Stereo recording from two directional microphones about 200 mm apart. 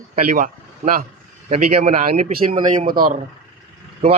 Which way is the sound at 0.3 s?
40° right (ahead or behind).